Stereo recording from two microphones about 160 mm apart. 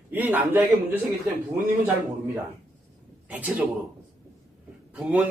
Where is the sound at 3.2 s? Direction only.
10° right (ahead or behind).